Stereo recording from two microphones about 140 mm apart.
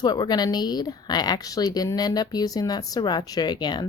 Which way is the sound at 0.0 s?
30° left (ahead or behind).